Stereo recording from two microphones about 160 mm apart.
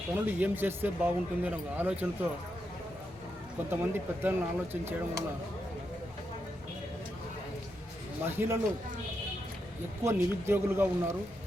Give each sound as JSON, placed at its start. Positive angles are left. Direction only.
{"t": 0.1, "sound": "speech", "side_deg": -10}
{"t": 3.7, "sound": "speech", "side_deg": -15}
{"t": 8.2, "sound": "speech", "side_deg": -15}
{"t": 10.0, "sound": "speech", "side_deg": -15}